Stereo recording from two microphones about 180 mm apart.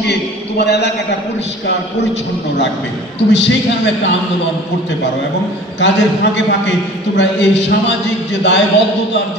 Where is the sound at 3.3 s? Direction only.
80° left.